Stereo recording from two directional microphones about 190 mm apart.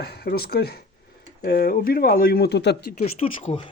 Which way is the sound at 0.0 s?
55° left (ahead or behind).